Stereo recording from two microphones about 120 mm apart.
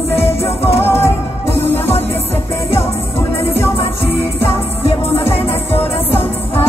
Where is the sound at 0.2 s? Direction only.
20° left (ahead or behind).